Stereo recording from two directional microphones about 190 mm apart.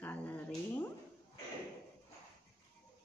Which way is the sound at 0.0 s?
10° left (ahead or behind).